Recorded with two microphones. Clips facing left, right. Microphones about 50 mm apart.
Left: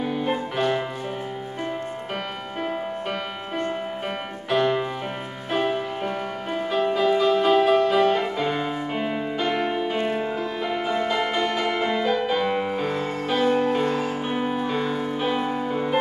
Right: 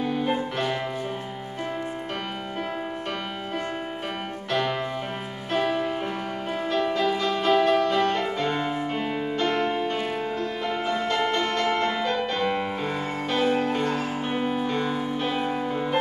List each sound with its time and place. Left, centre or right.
0.0 s music: centre
4.5 s music: centre
9.9 s music: centre
10.6 s music: centre